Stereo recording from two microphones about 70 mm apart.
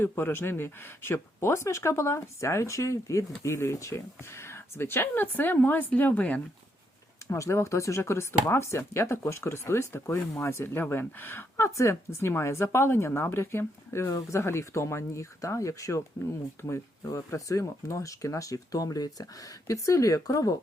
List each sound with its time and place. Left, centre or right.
0.0 s speech: left
7.3 s speech: left
14.1 s speech: left
14.3 s speech: left
16.6 s speech: left
17.1 s speech: left